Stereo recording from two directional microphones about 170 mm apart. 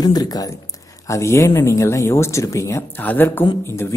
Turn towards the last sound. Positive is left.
turn(degrees=15)  # may be behind; listen again after turning